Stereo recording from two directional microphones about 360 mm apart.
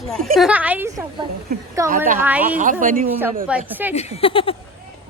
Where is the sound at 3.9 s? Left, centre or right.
Centre.